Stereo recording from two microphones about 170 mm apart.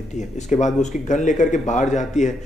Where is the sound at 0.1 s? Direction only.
45° left (ahead or behind).